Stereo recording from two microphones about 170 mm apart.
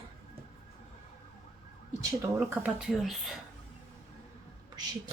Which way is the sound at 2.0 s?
15° right (ahead or behind).